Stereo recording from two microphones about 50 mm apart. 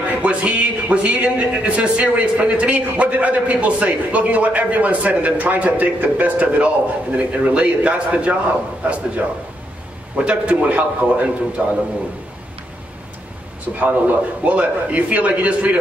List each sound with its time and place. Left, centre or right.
0.1 s a man's voice: right
10.5 s a man's voice: right
13.7 s a man's voice: right